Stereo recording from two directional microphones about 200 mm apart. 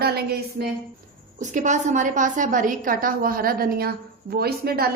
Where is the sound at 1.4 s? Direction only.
35° right (ahead or behind).